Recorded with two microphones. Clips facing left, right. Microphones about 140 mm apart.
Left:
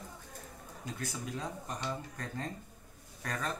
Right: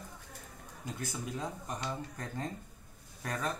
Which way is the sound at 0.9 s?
20° right (ahead or behind).